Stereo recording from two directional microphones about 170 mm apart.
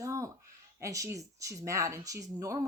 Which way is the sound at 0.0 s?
20° right (ahead or behind).